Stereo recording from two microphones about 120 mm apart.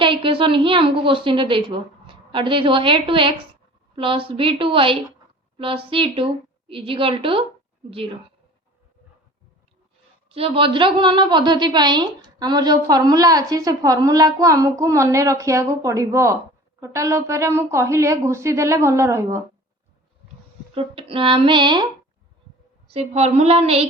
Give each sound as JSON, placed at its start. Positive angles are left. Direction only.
{"t": 0.0, "sound": "a woman's voice", "side_deg": -45}
{"t": 10.2, "sound": "a woman's voice", "side_deg": -50}
{"t": 20.7, "sound": "a woman's voice", "side_deg": -45}
{"t": 22.9, "sound": "a sound", "side_deg": -55}